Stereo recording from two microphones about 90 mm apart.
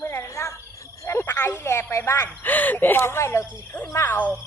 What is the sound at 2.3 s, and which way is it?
A woman's voice, 20° left (ahead or behind).